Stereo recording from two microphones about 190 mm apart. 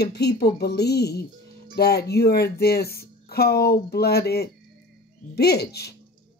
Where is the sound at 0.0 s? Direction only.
60° left (ahead or behind).